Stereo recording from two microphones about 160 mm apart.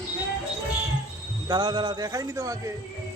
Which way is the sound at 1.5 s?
30° right (ahead or behind).